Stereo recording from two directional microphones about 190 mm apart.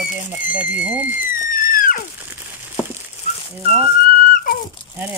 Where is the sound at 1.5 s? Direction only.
45° left (ahead or behind).